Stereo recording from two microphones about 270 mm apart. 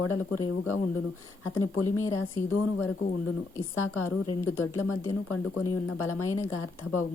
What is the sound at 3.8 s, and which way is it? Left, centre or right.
Speech, left.